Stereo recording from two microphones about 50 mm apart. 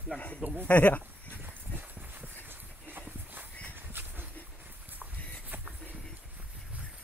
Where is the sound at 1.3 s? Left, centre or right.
Right.